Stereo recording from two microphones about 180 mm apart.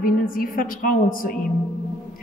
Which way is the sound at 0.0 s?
50° left (ahead or behind).